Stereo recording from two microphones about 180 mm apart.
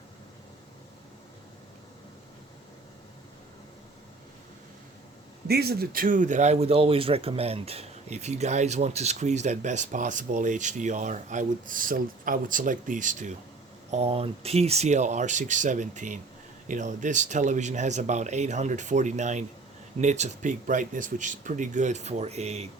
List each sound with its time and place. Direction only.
5.5 s speech: 60° right (ahead or behind); by 13.3 s 45° right (ahead or behind)
13.9 s speech: 35° right (ahead or behind)